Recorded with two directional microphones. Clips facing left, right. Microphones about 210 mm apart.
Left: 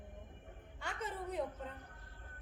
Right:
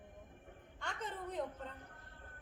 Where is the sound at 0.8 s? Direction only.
10° left (ahead or behind).